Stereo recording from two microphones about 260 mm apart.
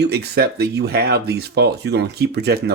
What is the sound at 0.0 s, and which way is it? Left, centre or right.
Speech, right.